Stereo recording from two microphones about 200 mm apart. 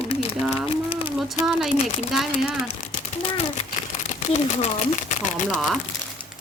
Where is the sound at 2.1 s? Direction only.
Centre (ahead or behind).